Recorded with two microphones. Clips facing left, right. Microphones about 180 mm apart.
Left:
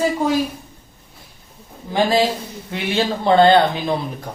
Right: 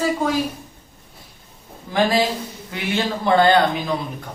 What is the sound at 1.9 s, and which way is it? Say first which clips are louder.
Speech: left 2 dB; 25° left (ahead or behind).